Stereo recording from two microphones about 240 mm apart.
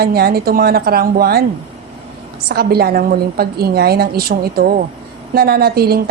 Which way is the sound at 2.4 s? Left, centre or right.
Right.